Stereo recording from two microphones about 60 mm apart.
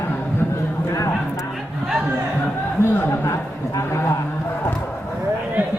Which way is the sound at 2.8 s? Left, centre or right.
Left.